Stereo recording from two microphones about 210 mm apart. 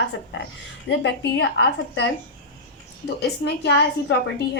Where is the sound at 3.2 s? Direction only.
55° left (ahead or behind).